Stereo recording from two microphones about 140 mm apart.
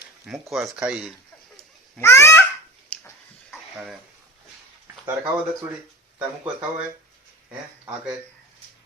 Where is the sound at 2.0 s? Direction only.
20° left (ahead or behind).